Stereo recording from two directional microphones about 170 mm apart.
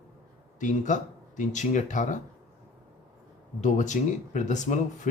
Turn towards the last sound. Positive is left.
turn(degrees=45)  # may be behind; listen again after turning